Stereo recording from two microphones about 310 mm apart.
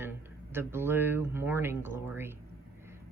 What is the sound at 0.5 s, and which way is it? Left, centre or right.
Speech, centre.